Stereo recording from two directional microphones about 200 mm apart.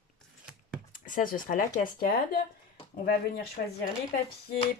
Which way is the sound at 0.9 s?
40° left (ahead or behind).